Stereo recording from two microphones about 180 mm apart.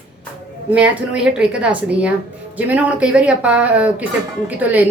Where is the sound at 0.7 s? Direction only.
5° right (ahead or behind).